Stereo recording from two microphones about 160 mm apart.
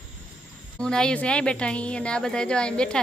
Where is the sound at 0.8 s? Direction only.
5° left (ahead or behind).